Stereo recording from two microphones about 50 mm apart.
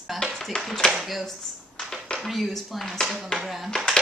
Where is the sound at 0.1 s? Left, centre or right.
Centre.